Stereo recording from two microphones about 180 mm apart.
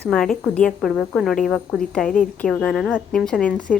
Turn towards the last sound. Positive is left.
turn(degrees=5)  # may be behind; listen again after turning